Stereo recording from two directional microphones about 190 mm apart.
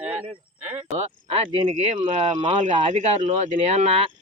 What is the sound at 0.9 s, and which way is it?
Speech, 30° right (ahead or behind).